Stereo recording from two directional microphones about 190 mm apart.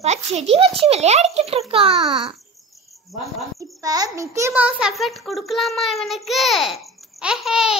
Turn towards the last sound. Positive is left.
turn(degrees=0)  # may be behind; listen again after turning